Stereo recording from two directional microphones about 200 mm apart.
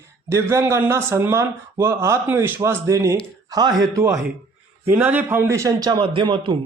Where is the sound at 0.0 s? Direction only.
15° right (ahead or behind).